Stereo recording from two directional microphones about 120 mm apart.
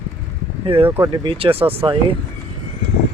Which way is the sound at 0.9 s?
20° right (ahead or behind).